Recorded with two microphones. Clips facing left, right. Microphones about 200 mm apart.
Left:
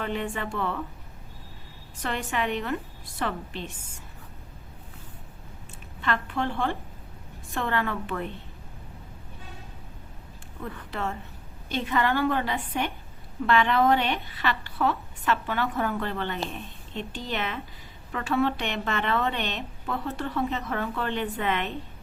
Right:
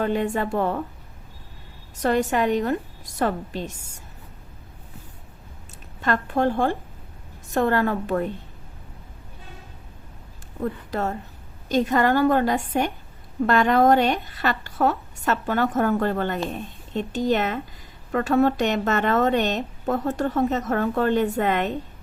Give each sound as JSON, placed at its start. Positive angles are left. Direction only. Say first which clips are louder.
{"t": 0.0, "sound": "a woman's voice", "louder": "right 7 dB", "side_deg": -40}
{"t": 2.0, "sound": "a woman's voice", "louder": "right 9 dB", "side_deg": -40}
{"t": 6.0, "sound": "a woman's voice", "louder": "right 6 dB", "side_deg": -45}
{"t": 10.9, "sound": "a woman's voice", "louder": "right 6 dB", "side_deg": -40}